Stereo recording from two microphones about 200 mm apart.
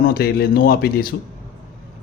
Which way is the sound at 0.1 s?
50° left (ahead or behind).